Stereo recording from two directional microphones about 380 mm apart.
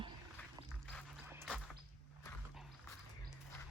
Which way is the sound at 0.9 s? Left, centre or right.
Centre.